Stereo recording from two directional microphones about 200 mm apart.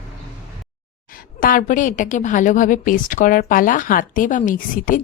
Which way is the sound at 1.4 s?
40° left (ahead or behind).